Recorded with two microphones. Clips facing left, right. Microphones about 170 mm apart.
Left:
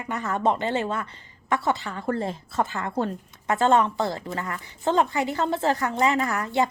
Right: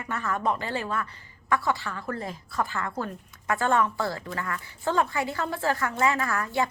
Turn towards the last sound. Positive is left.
turn(degrees=20)  # may be behind; listen again after turning